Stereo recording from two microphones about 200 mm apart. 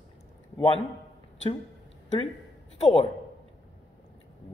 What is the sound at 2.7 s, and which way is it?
Speech, 30° left (ahead or behind).